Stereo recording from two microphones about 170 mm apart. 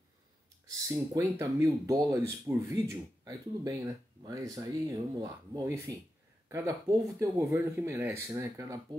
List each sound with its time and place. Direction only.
0.7 s speech: 20° right (ahead or behind)